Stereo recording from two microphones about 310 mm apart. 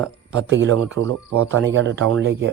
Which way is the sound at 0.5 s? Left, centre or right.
Right.